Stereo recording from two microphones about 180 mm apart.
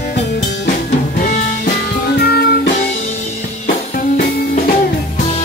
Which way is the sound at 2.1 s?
60° left (ahead or behind).